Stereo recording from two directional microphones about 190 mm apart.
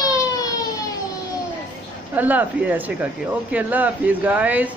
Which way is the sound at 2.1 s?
10° right (ahead or behind).